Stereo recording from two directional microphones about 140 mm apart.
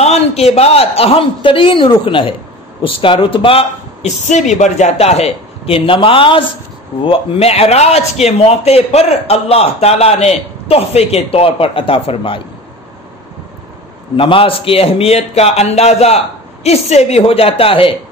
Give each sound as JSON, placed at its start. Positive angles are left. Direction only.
{"t": 0.0, "sound": "speech", "side_deg": 50}
{"t": 14.1, "sound": "speech", "side_deg": 40}